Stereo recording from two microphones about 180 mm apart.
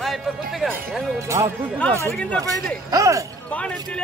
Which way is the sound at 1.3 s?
20° right (ahead or behind).